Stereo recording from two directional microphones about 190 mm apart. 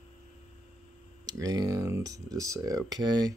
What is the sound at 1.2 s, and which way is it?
Speech, 20° right (ahead or behind).